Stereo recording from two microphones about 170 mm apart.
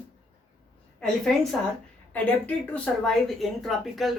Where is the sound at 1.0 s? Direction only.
5° left (ahead or behind).